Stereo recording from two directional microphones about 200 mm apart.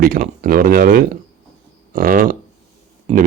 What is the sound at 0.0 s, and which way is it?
Speech, 45° right (ahead or behind).